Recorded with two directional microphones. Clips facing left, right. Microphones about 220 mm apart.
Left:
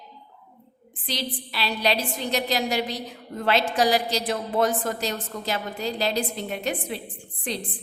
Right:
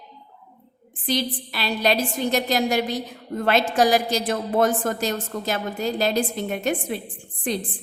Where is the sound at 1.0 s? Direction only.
50° right (ahead or behind).